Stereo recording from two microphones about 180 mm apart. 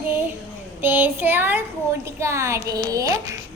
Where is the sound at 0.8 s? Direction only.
10° right (ahead or behind).